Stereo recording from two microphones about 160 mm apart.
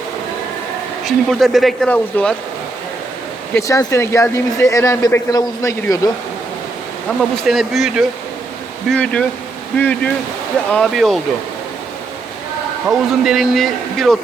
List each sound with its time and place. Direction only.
1.0 s a man's voice: centre (ahead or behind)
3.5 s speech: 20° left (ahead or behind)
7.2 s a man's voice: centre (ahead or behind)
12.9 s a man's voice: centre (ahead or behind)